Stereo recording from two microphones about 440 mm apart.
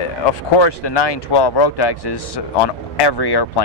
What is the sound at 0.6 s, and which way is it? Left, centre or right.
Speech, left.